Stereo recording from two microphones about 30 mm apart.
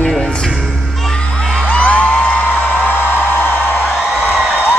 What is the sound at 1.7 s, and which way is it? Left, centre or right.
Music, left.